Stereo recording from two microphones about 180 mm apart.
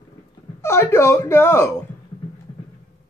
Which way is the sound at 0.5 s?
15° left (ahead or behind).